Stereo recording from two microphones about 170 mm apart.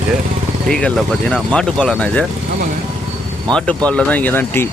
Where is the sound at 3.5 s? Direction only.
5° left (ahead or behind).